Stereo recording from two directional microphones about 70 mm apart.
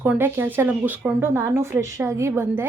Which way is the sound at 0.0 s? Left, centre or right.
Right.